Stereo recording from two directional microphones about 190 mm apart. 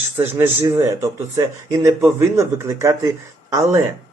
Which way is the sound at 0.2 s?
10° right (ahead or behind).